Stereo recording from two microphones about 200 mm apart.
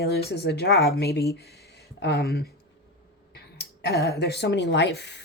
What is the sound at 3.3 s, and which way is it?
Speech, 55° left (ahead or behind).